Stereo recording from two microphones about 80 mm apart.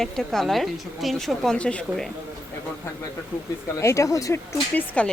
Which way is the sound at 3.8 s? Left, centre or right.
Left.